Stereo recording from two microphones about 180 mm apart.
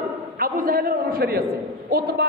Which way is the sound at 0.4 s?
55° right (ahead or behind).